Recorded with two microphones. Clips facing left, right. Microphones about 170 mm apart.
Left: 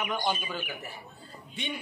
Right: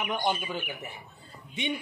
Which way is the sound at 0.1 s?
20° right (ahead or behind).